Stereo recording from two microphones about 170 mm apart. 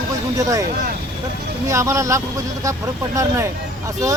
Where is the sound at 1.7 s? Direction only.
15° right (ahead or behind).